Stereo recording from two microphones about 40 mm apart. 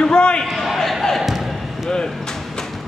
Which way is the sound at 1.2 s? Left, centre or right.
Centre.